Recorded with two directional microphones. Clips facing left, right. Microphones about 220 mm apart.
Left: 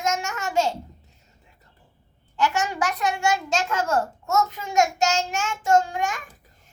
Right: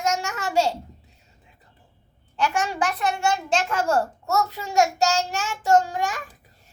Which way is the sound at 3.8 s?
30° right (ahead or behind).